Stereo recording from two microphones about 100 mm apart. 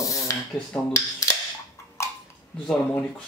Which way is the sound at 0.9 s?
35° left (ahead or behind).